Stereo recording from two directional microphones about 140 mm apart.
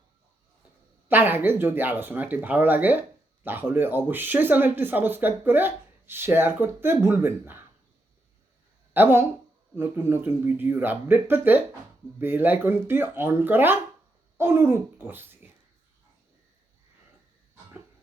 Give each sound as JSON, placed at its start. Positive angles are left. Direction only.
{"t": 1.0, "sound": "speech", "side_deg": -15}
{"t": 8.9, "sound": "speech", "side_deg": -15}